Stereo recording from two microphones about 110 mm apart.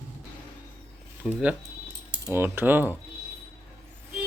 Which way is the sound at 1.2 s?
10° right (ahead or behind).